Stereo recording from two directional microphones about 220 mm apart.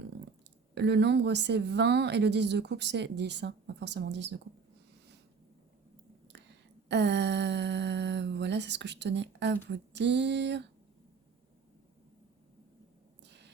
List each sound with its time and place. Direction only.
0.7 s speech: 50° right (ahead or behind)
6.8 s speech: 50° right (ahead or behind)
13.2 s a sound: 50° right (ahead or behind)